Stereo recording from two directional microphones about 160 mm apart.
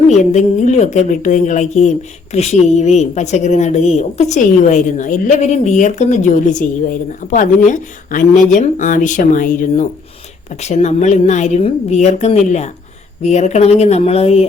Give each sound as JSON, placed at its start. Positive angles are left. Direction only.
{"t": 0.1, "sound": "a woman's voice", "side_deg": 45}
{"t": 10.6, "sound": "a woman's voice", "side_deg": 45}